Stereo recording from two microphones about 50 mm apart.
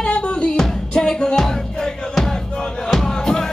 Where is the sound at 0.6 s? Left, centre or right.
Centre.